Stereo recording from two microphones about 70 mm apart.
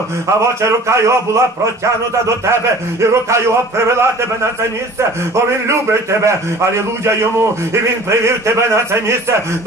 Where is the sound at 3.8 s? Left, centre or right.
Right.